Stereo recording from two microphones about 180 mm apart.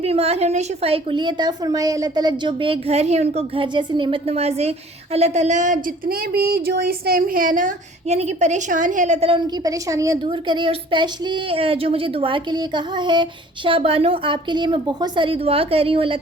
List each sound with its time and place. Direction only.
0.0 s a woman's voice: 35° right (ahead or behind)
9.6 s a woman's voice: 20° right (ahead or behind)